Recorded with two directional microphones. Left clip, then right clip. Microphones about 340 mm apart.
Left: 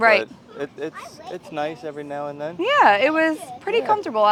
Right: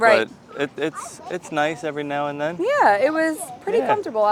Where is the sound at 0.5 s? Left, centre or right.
Right.